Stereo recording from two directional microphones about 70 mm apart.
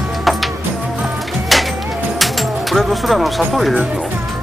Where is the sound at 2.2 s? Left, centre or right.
Centre.